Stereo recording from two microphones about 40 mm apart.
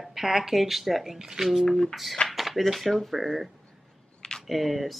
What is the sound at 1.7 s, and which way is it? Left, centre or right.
Speech, centre.